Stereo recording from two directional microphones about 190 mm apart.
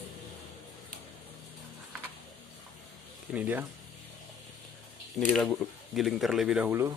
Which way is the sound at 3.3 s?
10° right (ahead or behind).